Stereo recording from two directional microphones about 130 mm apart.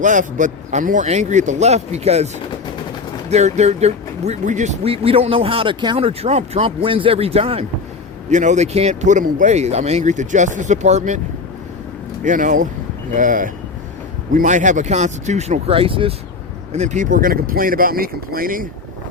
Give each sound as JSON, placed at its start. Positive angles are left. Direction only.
{"t": 0.0, "sound": "speech", "side_deg": -80}
{"t": 8.3, "sound": "speech", "side_deg": -65}
{"t": 12.2, "sound": "speech", "side_deg": -85}
{"t": 14.3, "sound": "speech", "side_deg": -70}
{"t": 16.7, "sound": "speech", "side_deg": -60}